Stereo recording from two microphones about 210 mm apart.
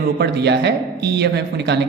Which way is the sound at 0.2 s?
50° right (ahead or behind).